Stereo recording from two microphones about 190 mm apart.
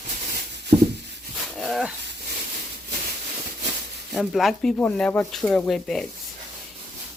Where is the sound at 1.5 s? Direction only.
Centre (ahead or behind).